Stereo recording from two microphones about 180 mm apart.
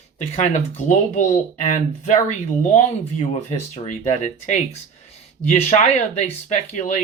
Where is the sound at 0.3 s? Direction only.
40° left (ahead or behind).